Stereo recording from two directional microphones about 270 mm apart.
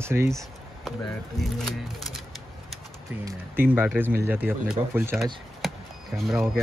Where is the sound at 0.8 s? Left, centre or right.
Centre.